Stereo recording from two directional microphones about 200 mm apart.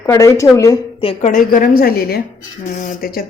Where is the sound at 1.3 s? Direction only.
45° left (ahead or behind).